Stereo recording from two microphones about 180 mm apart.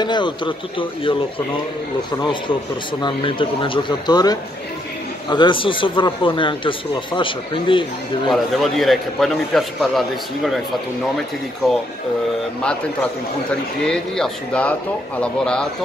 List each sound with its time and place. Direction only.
0.0 s speech: 25° left (ahead or behind)
3.0 s speech: 25° left (ahead or behind)
8.3 s a man's voice: centre (ahead or behind)
13.8 s a man's voice: 5° left (ahead or behind)